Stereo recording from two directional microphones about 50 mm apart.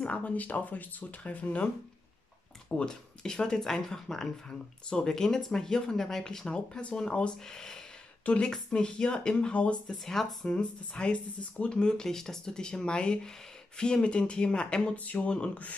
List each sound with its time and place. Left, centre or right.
0.0 s speech: left
2.8 s speech: centre
9.8 s speech: centre
10.4 s speech: left